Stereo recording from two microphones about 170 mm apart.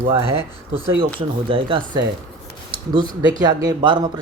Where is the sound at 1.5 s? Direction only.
30° right (ahead or behind).